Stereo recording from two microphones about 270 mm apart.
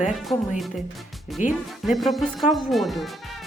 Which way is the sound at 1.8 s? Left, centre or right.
Centre.